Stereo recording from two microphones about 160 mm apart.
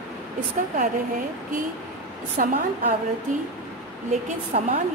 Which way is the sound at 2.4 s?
55° right (ahead or behind).